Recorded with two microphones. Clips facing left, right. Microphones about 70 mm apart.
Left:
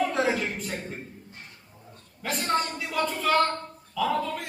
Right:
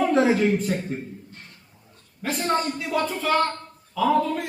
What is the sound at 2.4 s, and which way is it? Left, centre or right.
Speech, centre.